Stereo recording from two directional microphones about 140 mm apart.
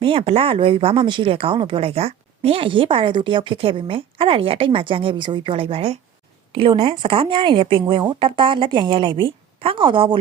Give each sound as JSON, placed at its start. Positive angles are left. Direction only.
{"t": 0.0, "sound": "speech", "side_deg": -40}